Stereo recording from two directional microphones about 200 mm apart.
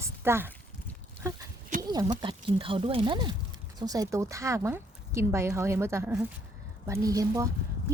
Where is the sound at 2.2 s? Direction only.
25° right (ahead or behind).